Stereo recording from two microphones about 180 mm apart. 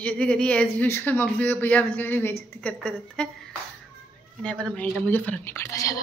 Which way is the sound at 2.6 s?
5° left (ahead or behind).